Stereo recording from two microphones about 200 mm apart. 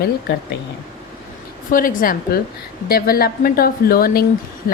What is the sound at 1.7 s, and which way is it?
A woman's voice, 45° left (ahead or behind).